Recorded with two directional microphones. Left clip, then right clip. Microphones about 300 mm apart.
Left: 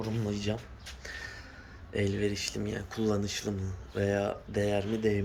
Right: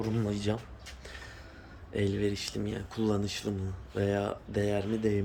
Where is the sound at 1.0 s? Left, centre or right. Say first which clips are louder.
Left 7 dB; centre.